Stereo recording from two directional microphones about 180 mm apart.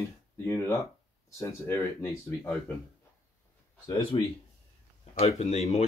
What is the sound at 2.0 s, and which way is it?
Speech, 15° left (ahead or behind).